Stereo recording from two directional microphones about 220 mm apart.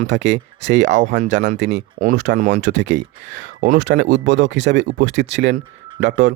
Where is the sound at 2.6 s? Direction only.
55° right (ahead or behind).